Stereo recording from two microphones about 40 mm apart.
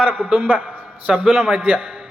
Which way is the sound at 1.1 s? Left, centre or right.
Centre.